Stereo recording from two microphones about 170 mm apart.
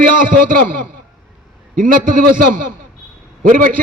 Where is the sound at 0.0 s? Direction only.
55° right (ahead or behind).